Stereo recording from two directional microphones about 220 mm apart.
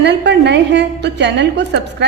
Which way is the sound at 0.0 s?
50° right (ahead or behind).